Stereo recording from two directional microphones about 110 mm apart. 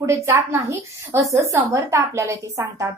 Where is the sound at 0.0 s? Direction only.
25° right (ahead or behind).